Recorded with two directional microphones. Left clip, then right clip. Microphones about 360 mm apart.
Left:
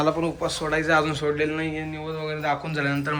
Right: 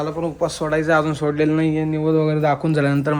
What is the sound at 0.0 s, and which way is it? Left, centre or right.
A man's voice, centre.